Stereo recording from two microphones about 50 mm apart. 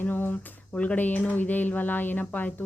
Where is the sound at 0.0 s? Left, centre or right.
Left.